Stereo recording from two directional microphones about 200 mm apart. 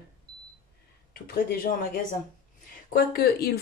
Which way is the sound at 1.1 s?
45° left (ahead or behind).